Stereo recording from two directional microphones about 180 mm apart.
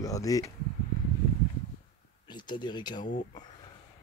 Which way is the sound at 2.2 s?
25° left (ahead or behind).